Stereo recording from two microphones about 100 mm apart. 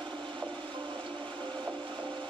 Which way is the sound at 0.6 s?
50° right (ahead or behind).